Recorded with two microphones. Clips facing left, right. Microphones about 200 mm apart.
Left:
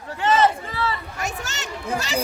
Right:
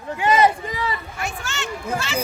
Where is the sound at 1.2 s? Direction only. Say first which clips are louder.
Right 1 dB; 40° left (ahead or behind).